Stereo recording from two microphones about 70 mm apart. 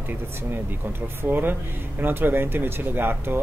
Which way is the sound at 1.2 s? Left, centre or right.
Right.